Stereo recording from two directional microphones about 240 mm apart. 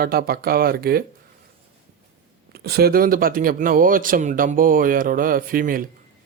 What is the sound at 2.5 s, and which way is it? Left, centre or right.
A man's voice, right.